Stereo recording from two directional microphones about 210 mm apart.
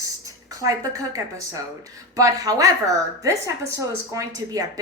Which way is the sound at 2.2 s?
15° right (ahead or behind).